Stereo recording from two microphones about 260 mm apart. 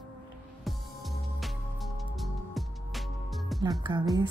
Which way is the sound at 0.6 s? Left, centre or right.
Centre.